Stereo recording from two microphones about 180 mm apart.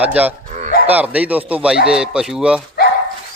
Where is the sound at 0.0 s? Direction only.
10° right (ahead or behind).